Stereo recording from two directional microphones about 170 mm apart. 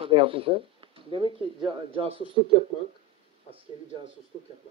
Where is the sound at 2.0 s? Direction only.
35° right (ahead or behind).